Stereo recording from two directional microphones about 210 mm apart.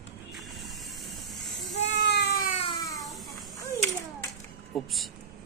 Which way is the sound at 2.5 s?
25° left (ahead or behind).